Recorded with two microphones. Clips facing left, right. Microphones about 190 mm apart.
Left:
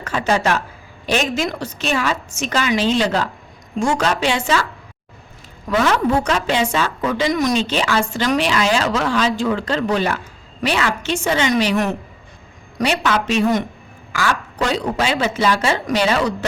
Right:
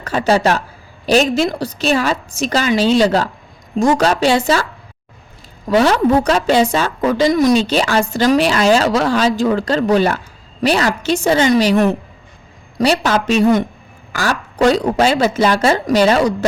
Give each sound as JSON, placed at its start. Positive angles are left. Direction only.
{"t": 0.0, "sound": "a woman's voice", "side_deg": -35}
{"t": 5.6, "sound": "a woman's voice", "side_deg": -30}